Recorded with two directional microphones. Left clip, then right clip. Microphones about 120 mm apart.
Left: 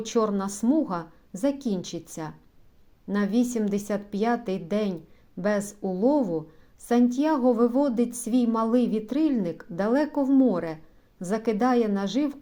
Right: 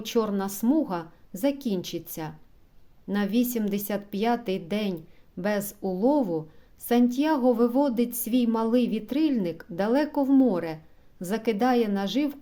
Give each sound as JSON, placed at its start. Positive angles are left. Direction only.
{"t": 0.0, "sound": "a woman's voice", "side_deg": -20}